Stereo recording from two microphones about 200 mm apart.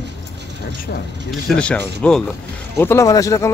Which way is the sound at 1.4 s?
5° left (ahead or behind).